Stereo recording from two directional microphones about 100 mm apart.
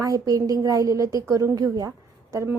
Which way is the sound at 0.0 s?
35° right (ahead or behind).